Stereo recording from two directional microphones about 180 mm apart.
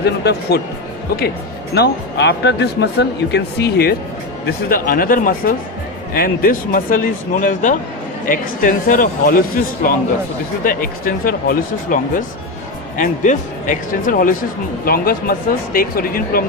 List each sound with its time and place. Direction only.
0.0 s speech: 65° left (ahead or behind)
1.7 s speech: 70° left (ahead or behind)
4.4 s speech: 55° left (ahead or behind)